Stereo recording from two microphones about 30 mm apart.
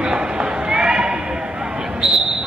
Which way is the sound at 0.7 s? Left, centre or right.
Right.